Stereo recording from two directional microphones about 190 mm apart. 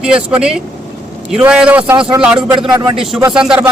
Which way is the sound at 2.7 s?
20° right (ahead or behind).